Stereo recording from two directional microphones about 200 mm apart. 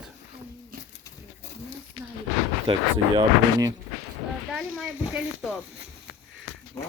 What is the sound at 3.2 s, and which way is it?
Speech, 15° right (ahead or behind).